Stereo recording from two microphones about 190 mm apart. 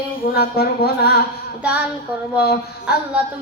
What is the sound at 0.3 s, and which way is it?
Speech, 55° left (ahead or behind).